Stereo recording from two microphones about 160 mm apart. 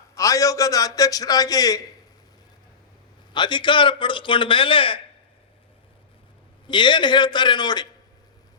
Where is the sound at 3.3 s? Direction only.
30° left (ahead or behind).